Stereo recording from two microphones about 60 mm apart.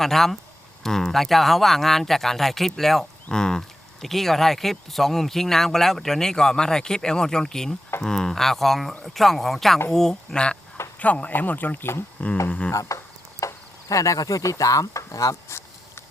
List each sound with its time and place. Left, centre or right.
0.0 s speech: centre; by 12.0 s left
12.5 s speech: left
12.7 s speech: left
13.4 s a sound: left